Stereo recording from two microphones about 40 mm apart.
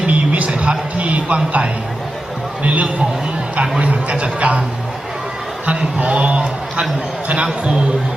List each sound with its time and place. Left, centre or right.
0.0 s music: right
2.6 s speech: right
6.1 s a man's voice: right